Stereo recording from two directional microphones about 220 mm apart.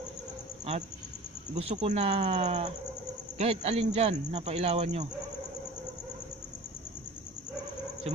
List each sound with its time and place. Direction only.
1.5 s speech: 30° right (ahead or behind)